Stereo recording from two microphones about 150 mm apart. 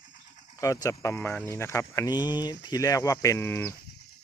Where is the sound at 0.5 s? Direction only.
20° left (ahead or behind).